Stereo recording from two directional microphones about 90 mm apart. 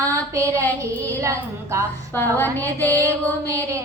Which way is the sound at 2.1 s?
25° left (ahead or behind).